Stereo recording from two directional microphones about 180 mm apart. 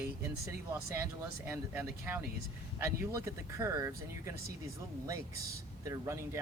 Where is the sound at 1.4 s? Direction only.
15° right (ahead or behind).